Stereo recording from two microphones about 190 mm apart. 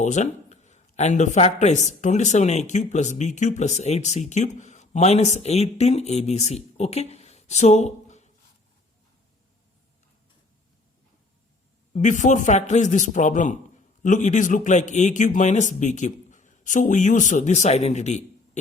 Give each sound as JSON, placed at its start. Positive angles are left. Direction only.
{"t": 0.0, "sound": "speech", "side_deg": 40}
{"t": 11.9, "sound": "speech", "side_deg": 40}